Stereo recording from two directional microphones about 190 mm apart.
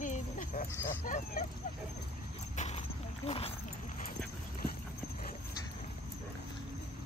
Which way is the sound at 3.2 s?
30° left (ahead or behind).